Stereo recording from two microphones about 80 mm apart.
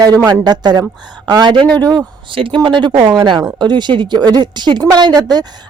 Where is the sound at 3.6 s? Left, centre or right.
Right.